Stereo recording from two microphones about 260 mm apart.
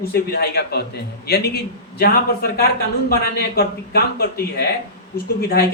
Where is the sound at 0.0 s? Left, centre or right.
Left.